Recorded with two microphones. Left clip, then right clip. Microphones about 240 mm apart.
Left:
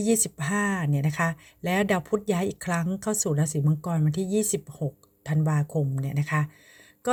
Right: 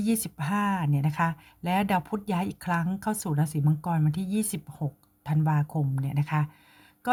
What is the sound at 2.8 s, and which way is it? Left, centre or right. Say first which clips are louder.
Speech: left 4 dB; centre.